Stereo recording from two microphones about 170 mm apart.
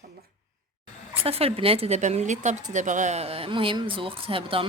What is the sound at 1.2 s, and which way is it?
A woman's voice, 35° right (ahead or behind).